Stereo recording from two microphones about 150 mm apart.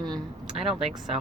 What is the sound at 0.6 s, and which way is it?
Speech, 35° right (ahead or behind).